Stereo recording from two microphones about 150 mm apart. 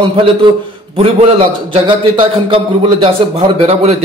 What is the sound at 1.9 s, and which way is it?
A man's voice, 35° right (ahead or behind).